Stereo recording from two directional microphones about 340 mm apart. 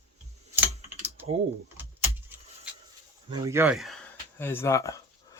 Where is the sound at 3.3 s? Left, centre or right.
Centre.